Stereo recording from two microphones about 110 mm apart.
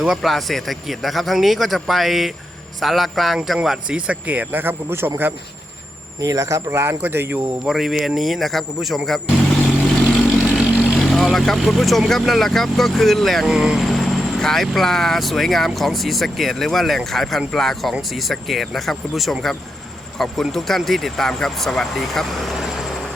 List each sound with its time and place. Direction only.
0.0 s speech: centre (ahead or behind); by 5.3 s 20° right (ahead or behind)
6.1 s speech: 30° right (ahead or behind)
7.6 s speech: 5° right (ahead or behind)
10.9 s speech: 5° left (ahead or behind)